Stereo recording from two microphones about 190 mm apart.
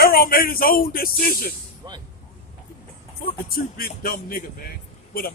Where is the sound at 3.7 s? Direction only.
50° left (ahead or behind).